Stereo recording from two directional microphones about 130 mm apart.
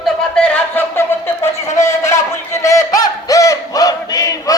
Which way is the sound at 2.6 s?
25° left (ahead or behind).